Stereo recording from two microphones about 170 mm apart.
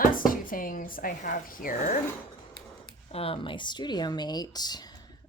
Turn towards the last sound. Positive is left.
turn(degrees=25)  # may be behind; listen again after turning